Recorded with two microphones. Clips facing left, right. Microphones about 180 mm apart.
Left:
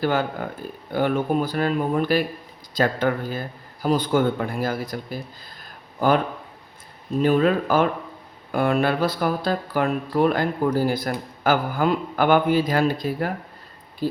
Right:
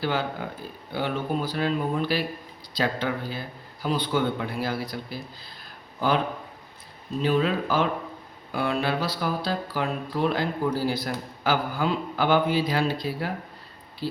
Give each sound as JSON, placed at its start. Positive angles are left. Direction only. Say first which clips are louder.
{"t": 0.0, "sound": "speech", "louder": "left 4 dB", "side_deg": 50}
{"t": 7.2, "sound": "speech", "louder": "left 5 dB", "side_deg": 50}